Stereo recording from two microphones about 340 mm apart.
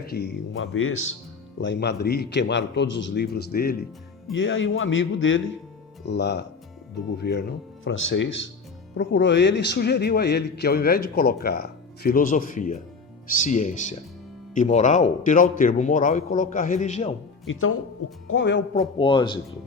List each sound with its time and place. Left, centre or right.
0.0 s a man's voice: left
17.4 s speech: left
18.7 s speech: centre